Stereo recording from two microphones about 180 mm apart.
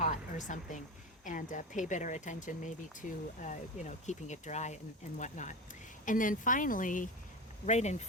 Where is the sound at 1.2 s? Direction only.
45° left (ahead or behind).